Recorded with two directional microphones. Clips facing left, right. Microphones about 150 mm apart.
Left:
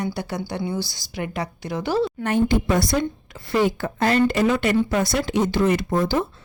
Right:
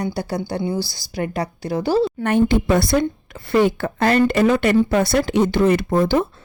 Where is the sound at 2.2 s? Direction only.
60° right (ahead or behind).